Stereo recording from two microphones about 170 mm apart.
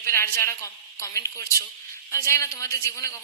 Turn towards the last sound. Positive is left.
turn(degrees=20)  # may be behind; listen again after turning